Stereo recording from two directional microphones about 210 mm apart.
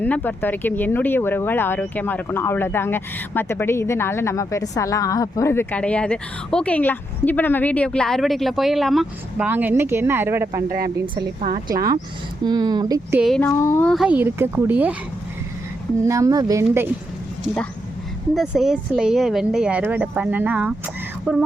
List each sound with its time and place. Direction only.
0.0 s speech: 10° left (ahead or behind); by 13.1 s 20° right (ahead or behind)
13.1 s speech: centre (ahead or behind)
13.5 s speech: 15° left (ahead or behind)
13.9 s speech: 5° right (ahead or behind)
16.0 s speech: 15° right (ahead or behind)
18.3 s speech: centre (ahead or behind)